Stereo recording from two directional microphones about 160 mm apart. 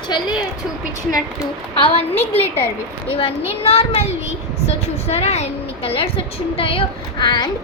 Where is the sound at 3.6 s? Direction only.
40° left (ahead or behind).